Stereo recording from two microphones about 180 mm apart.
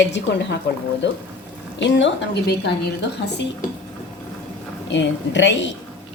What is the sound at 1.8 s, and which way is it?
Speech, 85° left.